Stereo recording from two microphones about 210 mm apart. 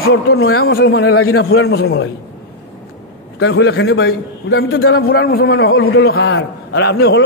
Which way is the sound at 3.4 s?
55° left (ahead or behind).